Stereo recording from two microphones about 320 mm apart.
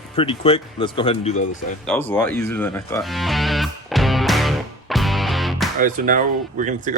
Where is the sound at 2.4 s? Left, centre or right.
Centre.